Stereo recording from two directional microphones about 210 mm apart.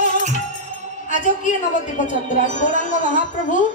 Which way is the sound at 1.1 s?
35° left (ahead or behind).